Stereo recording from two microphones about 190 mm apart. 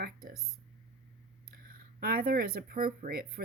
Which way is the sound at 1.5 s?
50° right (ahead or behind).